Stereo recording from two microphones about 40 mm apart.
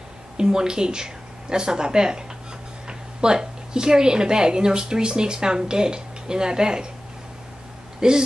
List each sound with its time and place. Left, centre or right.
0.4 s speech: centre
8.0 s speech: centre